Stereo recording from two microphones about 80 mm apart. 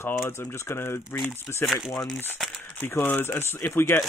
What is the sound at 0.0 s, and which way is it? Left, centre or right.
Speech, left.